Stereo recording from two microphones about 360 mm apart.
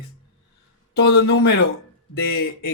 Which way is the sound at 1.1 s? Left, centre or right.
Left.